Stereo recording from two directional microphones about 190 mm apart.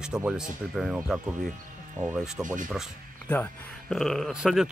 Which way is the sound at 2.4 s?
45° right (ahead or behind).